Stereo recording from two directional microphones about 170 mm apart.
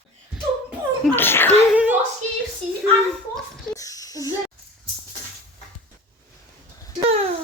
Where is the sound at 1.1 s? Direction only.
10° left (ahead or behind).